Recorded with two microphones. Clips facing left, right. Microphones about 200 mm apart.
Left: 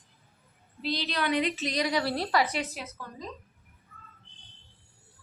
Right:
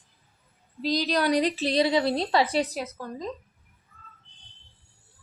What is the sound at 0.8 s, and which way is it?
A woman's voice, 40° right (ahead or behind).